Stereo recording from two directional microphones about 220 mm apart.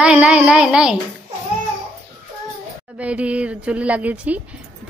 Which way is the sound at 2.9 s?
5° right (ahead or behind).